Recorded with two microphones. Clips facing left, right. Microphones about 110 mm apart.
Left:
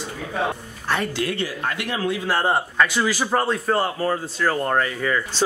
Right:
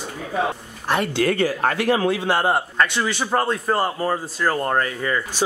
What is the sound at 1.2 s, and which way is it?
Speech, 45° right (ahead or behind).